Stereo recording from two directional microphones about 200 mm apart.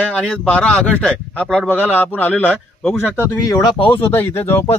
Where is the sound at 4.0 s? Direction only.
10° left (ahead or behind).